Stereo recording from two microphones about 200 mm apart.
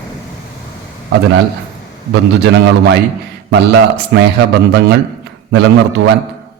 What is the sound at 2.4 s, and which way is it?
A man's voice, 60° right (ahead or behind).